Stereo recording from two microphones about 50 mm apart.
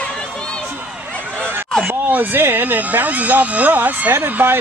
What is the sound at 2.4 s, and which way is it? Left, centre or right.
Speech, right.